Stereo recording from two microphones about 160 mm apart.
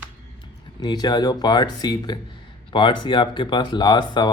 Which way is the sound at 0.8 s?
25° left (ahead or behind).